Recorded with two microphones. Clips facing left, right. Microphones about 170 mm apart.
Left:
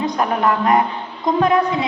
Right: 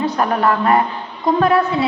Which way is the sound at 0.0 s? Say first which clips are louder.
Right 1 dB; 15° left (ahead or behind).